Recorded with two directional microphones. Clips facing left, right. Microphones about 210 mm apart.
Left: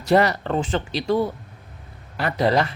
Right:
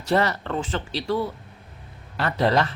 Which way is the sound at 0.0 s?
15° left (ahead or behind).